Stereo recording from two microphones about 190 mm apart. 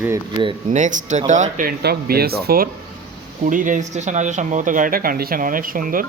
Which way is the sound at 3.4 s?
40° right (ahead or behind).